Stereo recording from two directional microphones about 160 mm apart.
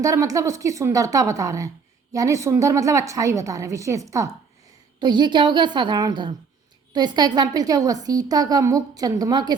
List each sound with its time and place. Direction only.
0.0 s a woman's voice: 20° right (ahead or behind)